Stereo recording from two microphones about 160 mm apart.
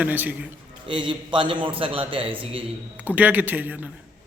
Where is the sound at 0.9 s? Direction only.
30° right (ahead or behind).